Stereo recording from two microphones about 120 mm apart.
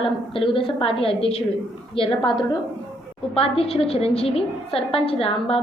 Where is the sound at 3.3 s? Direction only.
55° left (ahead or behind).